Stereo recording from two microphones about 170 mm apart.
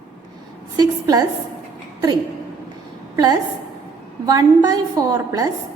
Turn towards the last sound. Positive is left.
turn(degrees=-20)  # may be behind; listen again after turning